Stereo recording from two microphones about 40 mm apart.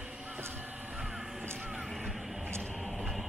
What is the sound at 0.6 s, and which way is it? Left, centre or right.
Vehicle, right.